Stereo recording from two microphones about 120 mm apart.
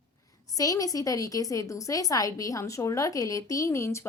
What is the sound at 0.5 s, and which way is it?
Speech, 30° left (ahead or behind).